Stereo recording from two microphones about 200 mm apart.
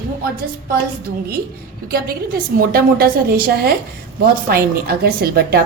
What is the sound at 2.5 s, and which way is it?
A woman's voice, 45° right (ahead or behind).